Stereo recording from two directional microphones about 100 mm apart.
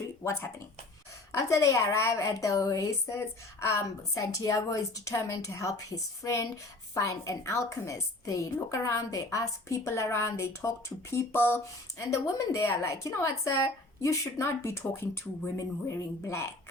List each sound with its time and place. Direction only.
0.3 s a woman's voice: 25° left (ahead or behind)